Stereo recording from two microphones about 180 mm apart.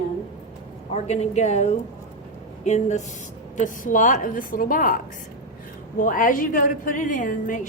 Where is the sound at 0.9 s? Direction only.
40° left (ahead or behind).